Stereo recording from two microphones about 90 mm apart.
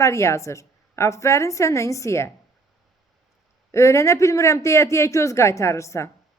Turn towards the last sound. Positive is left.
turn(degrees=35)  # may be behind; listen again after turning